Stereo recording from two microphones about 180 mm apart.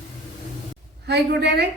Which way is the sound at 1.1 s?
65° right (ahead or behind).